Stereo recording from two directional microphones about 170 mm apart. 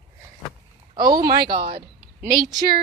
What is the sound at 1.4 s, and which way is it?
Speech, 70° right (ahead or behind).